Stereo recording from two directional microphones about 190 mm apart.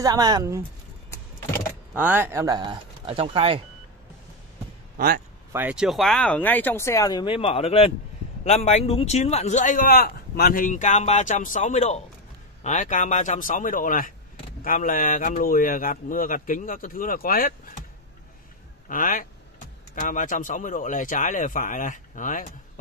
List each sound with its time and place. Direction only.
0.0 s speech: 20° right (ahead or behind)
2.0 s speech: 10° right (ahead or behind); by 3.6 s 30° right (ahead or behind)
4.9 s speech: 50° right (ahead or behind)
5.5 s speech: 10° right (ahead or behind); by 17.6 s 50° left (ahead or behind)
18.9 s speech: 45° left (ahead or behind)